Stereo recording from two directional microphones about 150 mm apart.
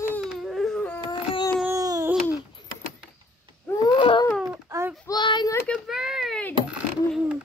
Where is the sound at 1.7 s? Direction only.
20° right (ahead or behind).